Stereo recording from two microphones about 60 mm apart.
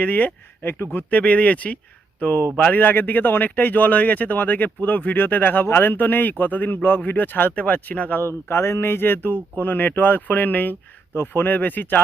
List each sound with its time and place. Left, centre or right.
0.0 s speech: left
8.2 s speech: left